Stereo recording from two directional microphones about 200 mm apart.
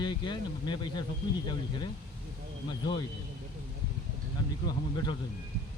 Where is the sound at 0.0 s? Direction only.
20° left (ahead or behind).